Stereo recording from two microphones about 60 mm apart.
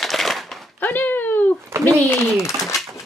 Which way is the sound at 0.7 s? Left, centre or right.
Left.